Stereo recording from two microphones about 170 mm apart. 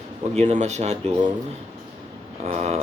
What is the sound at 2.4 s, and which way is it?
Speech, 40° right (ahead or behind).